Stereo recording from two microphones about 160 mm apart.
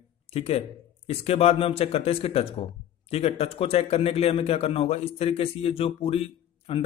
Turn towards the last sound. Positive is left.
turn(degrees=35)  # may be behind; listen again after turning